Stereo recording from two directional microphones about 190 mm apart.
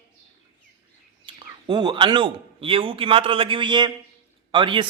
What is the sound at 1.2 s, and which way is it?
A man's voice, 25° right (ahead or behind).